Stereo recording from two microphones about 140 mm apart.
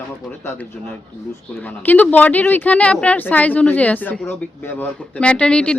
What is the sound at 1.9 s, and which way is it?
Speech, 10° left (ahead or behind).